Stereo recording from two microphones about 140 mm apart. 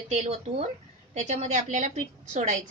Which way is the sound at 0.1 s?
55° right (ahead or behind).